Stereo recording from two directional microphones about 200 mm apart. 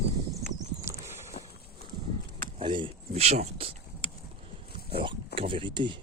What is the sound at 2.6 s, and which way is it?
Speech, 25° right (ahead or behind).